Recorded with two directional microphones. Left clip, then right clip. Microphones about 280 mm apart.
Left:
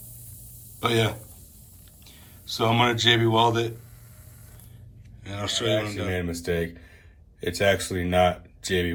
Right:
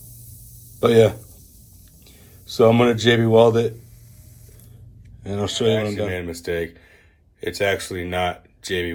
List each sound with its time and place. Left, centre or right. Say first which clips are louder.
0.8 s speech: right 9 dB; centre
2.6 s speech: right 7 dB; centre
5.2 s speech: right 6 dB; centre